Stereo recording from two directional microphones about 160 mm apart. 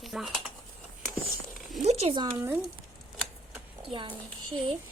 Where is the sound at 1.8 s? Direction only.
40° right (ahead or behind).